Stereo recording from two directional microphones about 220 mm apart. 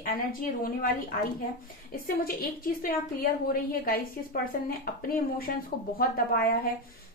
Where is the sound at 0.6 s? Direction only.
40° left (ahead or behind).